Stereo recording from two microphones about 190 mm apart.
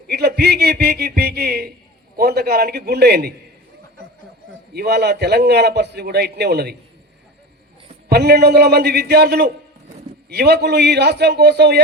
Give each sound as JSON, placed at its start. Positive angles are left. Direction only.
{"t": 0.1, "sound": "a man's voice", "side_deg": -55}
{"t": 4.7, "sound": "a man's voice", "side_deg": -60}
{"t": 8.1, "sound": "a man's voice", "side_deg": -60}